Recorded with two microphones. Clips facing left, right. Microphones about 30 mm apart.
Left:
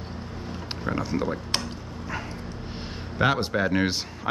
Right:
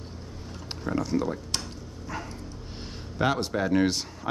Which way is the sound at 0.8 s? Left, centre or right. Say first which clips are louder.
Even; left.